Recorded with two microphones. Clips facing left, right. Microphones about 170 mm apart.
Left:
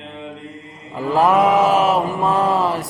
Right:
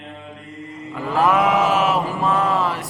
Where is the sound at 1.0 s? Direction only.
35° left (ahead or behind).